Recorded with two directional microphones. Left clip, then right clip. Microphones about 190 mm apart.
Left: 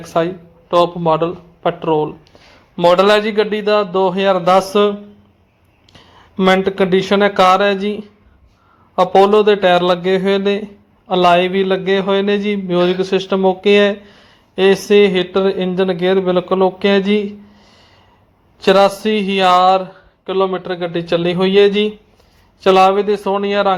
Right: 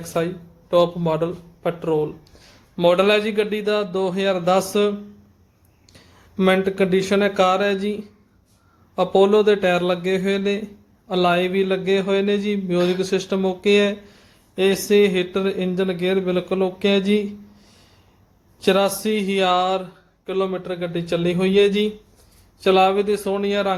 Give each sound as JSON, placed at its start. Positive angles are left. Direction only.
{"t": 0.1, "sound": "speech", "side_deg": 0}
{"t": 6.1, "sound": "speech", "side_deg": 0}
{"t": 17.6, "sound": "a sound", "side_deg": -30}
{"t": 18.6, "sound": "speech", "side_deg": 5}